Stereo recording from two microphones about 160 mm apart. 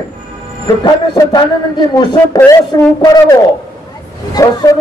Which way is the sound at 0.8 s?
25° left (ahead or behind).